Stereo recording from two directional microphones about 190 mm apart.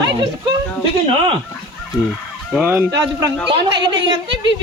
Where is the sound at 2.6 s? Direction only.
10° right (ahead or behind).